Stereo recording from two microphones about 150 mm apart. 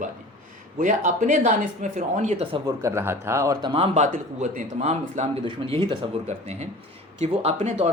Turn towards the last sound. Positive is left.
turn(degrees=-45)  # may be behind; listen again after turning